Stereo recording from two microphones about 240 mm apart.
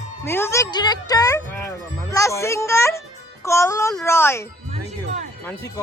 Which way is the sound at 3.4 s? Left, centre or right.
Centre.